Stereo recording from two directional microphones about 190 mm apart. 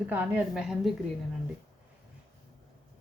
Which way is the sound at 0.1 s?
5° right (ahead or behind).